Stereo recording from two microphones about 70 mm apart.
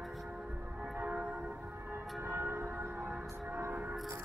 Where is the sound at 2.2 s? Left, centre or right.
Right.